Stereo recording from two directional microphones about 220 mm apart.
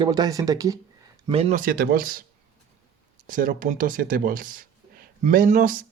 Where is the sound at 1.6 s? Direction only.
40° right (ahead or behind).